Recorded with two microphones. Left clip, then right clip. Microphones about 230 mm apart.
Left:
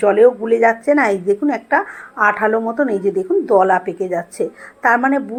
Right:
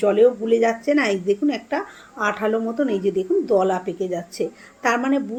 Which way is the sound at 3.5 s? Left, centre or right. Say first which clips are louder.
Left 8 dB; centre.